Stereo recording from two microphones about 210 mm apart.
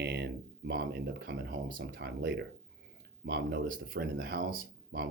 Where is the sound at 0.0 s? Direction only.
55° right (ahead or behind).